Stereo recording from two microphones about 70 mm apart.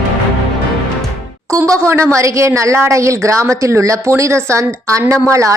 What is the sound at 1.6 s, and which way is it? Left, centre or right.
Speech, right.